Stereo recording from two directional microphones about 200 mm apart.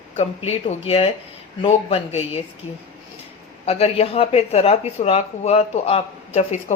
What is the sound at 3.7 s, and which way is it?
Speech, 30° left (ahead or behind).